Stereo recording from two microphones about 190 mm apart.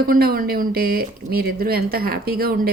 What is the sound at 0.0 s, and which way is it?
A woman's voice, 55° right (ahead or behind).